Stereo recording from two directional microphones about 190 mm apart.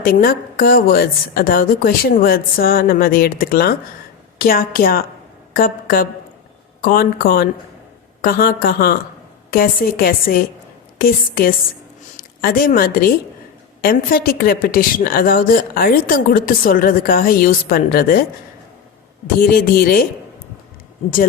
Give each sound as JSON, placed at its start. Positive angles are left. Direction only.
{"t": 0.0, "sound": "a woman's voice", "side_deg": 50}
{"t": 19.4, "sound": "a woman's voice", "side_deg": 50}